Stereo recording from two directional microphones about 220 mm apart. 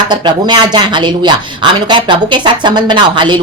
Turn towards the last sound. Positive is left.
turn(degrees=-20)  # may be behind; listen again after turning